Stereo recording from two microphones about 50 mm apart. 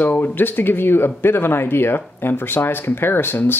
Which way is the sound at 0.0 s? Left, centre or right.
Left.